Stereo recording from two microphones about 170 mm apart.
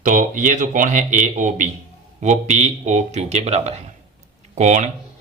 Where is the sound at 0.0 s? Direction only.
50° right (ahead or behind).